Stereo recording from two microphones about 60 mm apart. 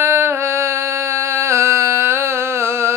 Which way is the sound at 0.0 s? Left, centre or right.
Right.